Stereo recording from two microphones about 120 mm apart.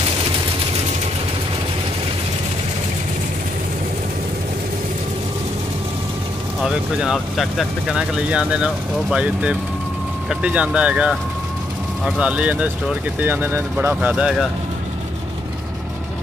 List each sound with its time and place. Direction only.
6.6 s speech: centre (ahead or behind)